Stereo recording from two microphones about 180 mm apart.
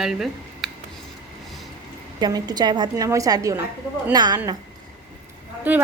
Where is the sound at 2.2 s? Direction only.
20° right (ahead or behind).